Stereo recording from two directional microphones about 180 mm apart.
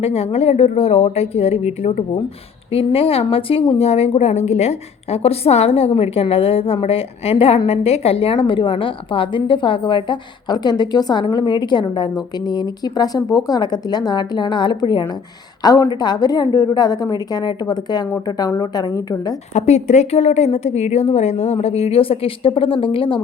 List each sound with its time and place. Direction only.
0.0 s a woman's voice: 35° left (ahead or behind); by 19.3 s 20° left (ahead or behind)
19.5 s a woman's voice: 40° left (ahead or behind)